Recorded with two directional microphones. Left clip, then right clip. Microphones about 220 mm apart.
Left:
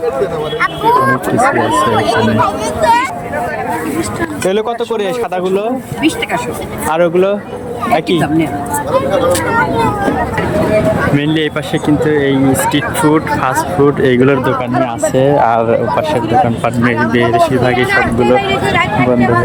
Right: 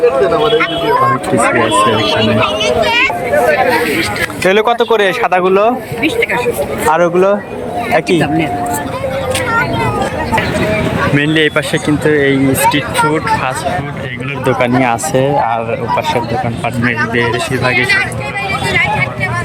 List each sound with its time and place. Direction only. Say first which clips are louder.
4.4 s speech: right 5 dB; 5° left (ahead or behind)
6.9 s speech: even; 10° left (ahead or behind)
12.0 s speech: right 3 dB; 5° left (ahead or behind)
14.0 s speech: left 12 dB; 25° left (ahead or behind)
15.1 s speech: left 2 dB; 10° left (ahead or behind)